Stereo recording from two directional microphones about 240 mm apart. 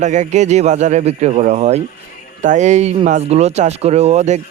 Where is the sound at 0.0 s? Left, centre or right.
Right.